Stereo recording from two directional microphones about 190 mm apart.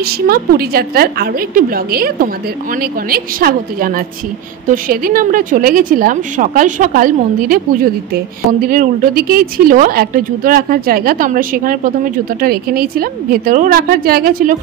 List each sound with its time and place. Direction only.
0.0 s a woman's voice: 50° right (ahead or behind)